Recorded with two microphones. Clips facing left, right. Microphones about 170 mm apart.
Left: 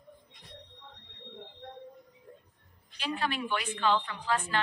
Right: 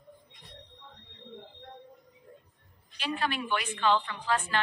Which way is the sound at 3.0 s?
70° right (ahead or behind).